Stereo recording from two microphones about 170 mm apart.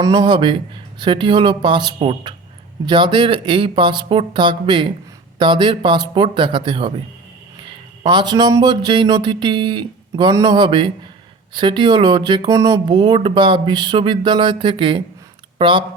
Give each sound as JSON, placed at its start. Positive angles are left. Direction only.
{"t": 0.0, "sound": "speech", "side_deg": -25}
{"t": 8.0, "sound": "speech", "side_deg": -25}